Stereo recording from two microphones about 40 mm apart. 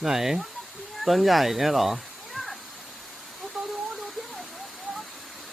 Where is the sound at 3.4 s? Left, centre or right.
Centre.